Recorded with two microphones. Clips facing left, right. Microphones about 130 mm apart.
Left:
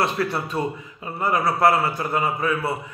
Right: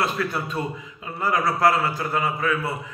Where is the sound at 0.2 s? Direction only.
30° left (ahead or behind).